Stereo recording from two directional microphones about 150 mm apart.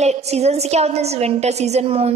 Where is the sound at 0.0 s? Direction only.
45° right (ahead or behind).